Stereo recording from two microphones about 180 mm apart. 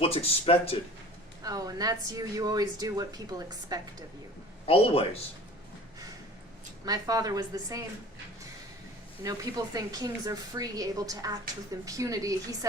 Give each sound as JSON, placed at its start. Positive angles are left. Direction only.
{"t": 0.0, "sound": "speech", "side_deg": 30}
{"t": 1.5, "sound": "speech", "side_deg": -20}
{"t": 4.6, "sound": "speech", "side_deg": 30}
{"t": 6.8, "sound": "speech", "side_deg": -20}
{"t": 9.2, "sound": "speech", "side_deg": -20}